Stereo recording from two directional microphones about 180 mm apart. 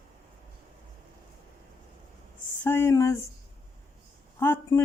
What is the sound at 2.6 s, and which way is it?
Speech, 10° left (ahead or behind).